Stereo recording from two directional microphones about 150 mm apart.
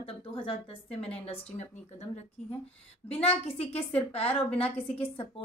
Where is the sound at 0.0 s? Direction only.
40° left (ahead or behind).